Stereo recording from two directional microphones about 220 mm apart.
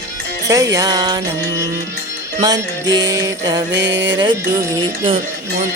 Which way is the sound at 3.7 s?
55° right (ahead or behind).